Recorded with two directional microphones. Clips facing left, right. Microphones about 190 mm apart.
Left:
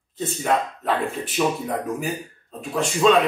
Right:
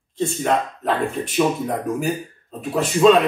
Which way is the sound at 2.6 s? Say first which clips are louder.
Right 4 dB; 5° right (ahead or behind).